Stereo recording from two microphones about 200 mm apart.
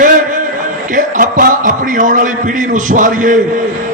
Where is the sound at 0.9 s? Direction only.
40° right (ahead or behind).